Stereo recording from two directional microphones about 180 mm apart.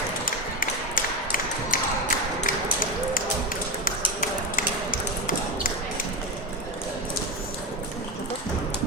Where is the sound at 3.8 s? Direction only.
50° left (ahead or behind).